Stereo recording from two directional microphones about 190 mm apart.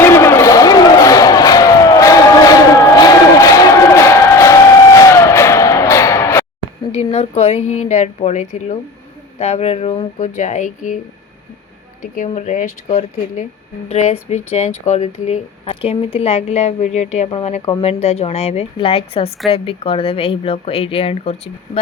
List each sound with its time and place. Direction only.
0.0 s a sound: 15° left (ahead or behind)
6.9 s speech: 35° left (ahead or behind)
12.1 s speech: 40° left (ahead or behind)